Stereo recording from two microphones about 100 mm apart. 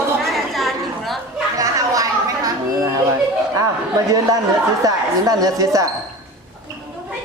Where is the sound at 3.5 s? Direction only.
35° right (ahead or behind).